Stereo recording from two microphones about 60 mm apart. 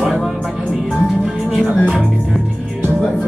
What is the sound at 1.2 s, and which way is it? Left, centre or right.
Speech, centre.